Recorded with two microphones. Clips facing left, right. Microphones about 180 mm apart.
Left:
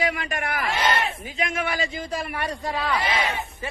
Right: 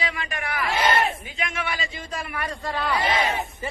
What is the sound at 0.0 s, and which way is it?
A man's voice, 45° left (ahead or behind).